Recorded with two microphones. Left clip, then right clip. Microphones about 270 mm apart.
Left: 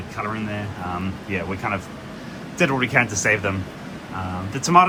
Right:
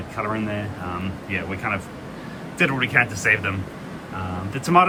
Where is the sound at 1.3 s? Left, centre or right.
Centre.